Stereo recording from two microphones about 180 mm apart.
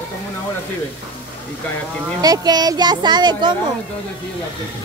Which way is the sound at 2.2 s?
20° right (ahead or behind).